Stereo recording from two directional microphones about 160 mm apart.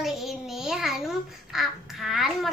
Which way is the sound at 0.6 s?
5° right (ahead or behind).